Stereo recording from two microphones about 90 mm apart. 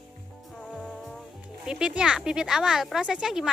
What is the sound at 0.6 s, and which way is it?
Music, 10° left (ahead or behind).